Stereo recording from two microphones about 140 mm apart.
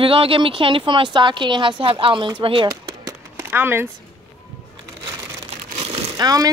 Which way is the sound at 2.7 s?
25° right (ahead or behind).